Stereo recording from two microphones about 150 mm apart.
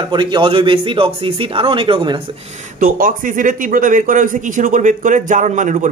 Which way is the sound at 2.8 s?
65° right (ahead or behind).